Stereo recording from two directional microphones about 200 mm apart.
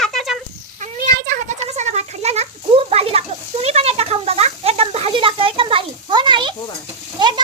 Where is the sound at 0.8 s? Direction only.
45° right (ahead or behind).